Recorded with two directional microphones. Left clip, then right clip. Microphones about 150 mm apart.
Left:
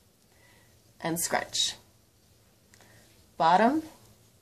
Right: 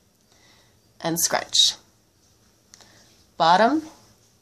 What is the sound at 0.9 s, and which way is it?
Speech, centre (ahead or behind).